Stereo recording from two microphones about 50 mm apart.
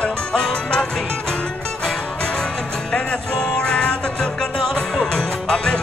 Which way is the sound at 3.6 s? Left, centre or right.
Centre.